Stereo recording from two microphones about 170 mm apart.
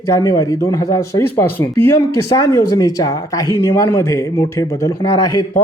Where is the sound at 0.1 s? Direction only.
20° left (ahead or behind).